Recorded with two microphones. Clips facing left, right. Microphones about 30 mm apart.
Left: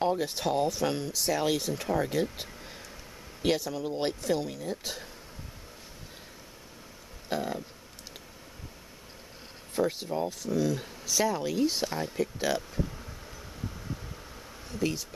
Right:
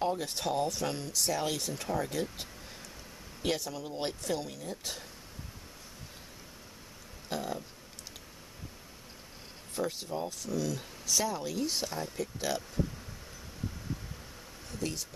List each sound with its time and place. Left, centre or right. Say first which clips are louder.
0.2 s speech: left 4 dB; centre
7.2 s speech: left 4 dB; centre
9.8 s speech: left 5 dB; centre
14.8 s speech: left 6 dB; centre